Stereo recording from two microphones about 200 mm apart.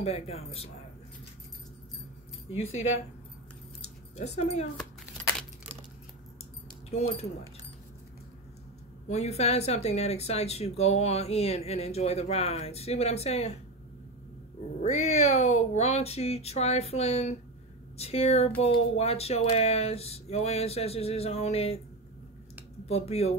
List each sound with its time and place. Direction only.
0.0 s speech: 30° left (ahead or behind)
2.5 s speech: 30° left (ahead or behind)
3.8 s keys jangling: 35° left (ahead or behind)
6.9 s speech: 30° left (ahead or behind)
9.1 s speech: 30° left (ahead or behind)
14.8 s speech: 30° left (ahead or behind)
22.8 s speech: 30° left (ahead or behind)